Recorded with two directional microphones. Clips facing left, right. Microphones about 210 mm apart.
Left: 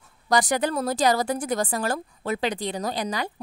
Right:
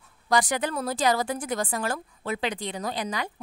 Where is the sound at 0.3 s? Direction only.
40° left (ahead or behind).